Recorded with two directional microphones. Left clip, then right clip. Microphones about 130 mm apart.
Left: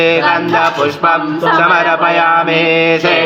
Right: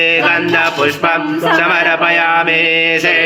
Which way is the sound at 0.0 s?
5° left (ahead or behind).